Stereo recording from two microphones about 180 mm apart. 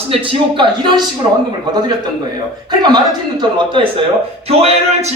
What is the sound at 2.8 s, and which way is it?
A man's voice, 25° right (ahead or behind).